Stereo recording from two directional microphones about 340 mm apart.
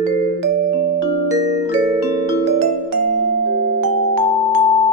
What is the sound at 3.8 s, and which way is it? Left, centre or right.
Music, right.